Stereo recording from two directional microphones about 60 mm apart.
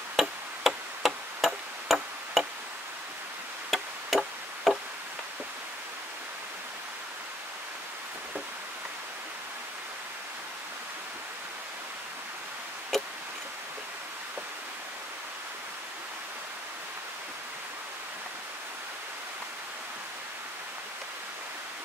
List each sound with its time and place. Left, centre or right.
0.1 s tick-tock: centre
3.7 s chop: centre
12.9 s a sound: centre